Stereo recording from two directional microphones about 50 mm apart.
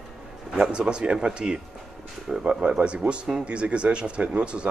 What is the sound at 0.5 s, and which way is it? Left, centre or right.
Speech, centre.